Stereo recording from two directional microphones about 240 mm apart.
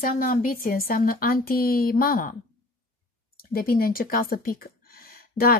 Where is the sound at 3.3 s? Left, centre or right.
Left.